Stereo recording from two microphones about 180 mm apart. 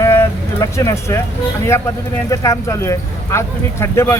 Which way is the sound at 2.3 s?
15° left (ahead or behind).